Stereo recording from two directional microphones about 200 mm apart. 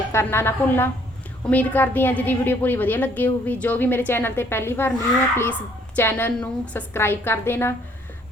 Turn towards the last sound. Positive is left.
turn(degrees=10)  # may be behind; listen again after turning